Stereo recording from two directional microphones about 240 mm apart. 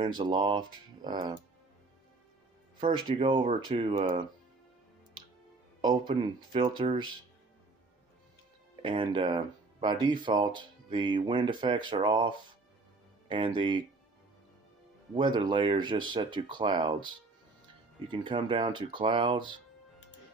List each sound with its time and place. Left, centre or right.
0.0 s speech: centre
3.2 s speech: centre
5.8 s speech: centre
8.8 s speech: right
15.1 s speech: centre